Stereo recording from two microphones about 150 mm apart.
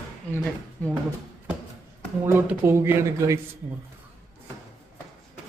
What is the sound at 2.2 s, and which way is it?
Speech, 15° right (ahead or behind).